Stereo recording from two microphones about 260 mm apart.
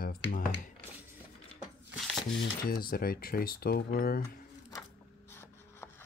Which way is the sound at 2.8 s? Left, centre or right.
Left.